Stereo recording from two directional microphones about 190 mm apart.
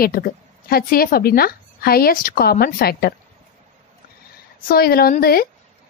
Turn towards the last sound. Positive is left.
turn(degrees=50)  # may be behind; listen again after turning